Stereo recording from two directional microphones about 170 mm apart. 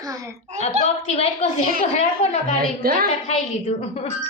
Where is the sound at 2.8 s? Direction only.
60° right (ahead or behind).